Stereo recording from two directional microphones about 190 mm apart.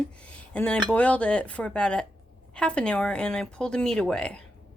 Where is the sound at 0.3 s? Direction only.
5° left (ahead or behind).